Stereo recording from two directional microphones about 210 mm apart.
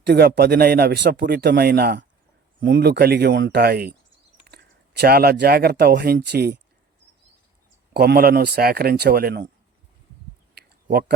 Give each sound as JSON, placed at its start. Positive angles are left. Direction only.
{"t": 0.0, "sound": "speech", "side_deg": -50}
{"t": 7.9, "sound": "speech", "side_deg": -50}